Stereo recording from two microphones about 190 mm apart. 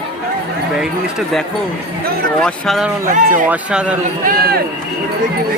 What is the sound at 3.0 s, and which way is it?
Speech, 45° right (ahead or behind).